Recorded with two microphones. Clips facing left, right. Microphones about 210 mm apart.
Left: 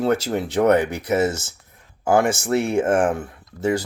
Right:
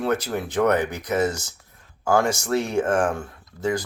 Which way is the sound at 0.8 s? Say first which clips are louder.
Left 2 dB; 10° left (ahead or behind).